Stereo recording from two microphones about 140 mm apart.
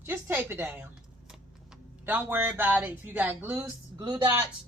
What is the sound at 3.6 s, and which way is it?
Speech, 20° right (ahead or behind).